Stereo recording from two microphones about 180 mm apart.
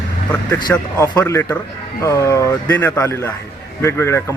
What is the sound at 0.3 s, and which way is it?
Speech, 10° left (ahead or behind).